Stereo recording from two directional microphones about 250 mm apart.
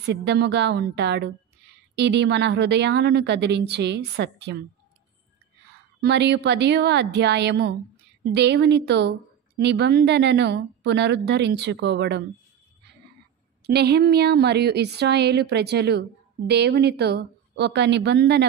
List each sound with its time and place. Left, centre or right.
0.0 s a woman's voice: right
5.9 s a woman's voice: right
13.7 s speech: right